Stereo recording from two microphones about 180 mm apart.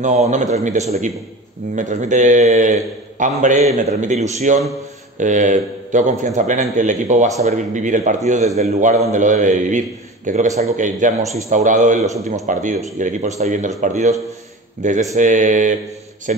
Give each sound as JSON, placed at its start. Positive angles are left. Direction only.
{"t": 0.0, "sound": "a man's voice", "side_deg": -40}